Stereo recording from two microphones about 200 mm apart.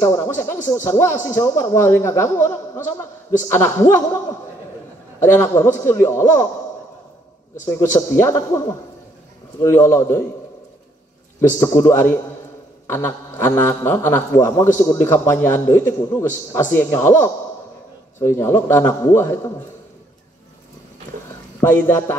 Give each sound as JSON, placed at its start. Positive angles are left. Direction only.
{"t": 0.0, "sound": "a man's voice", "side_deg": 15}
{"t": 5.2, "sound": "a man's voice", "side_deg": 15}
{"t": 7.6, "sound": "a man's voice", "side_deg": 15}
{"t": 11.6, "sound": "a man's voice", "side_deg": 15}
{"t": 21.5, "sound": "a man's voice", "side_deg": 15}